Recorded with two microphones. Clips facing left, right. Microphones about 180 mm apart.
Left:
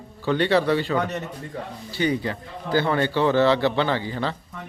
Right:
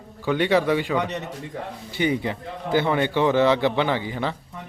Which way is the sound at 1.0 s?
Centre (ahead or behind).